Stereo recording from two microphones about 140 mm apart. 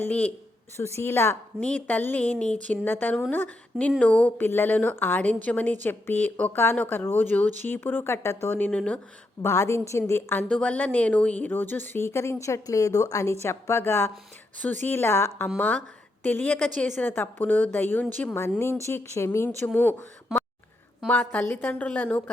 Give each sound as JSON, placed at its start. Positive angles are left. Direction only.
{"t": 0.0, "sound": "a woman's voice", "side_deg": 10}
{"t": 9.4, "sound": "a woman's voice", "side_deg": 20}